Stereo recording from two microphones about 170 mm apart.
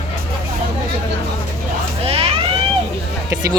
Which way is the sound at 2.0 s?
35° right (ahead or behind).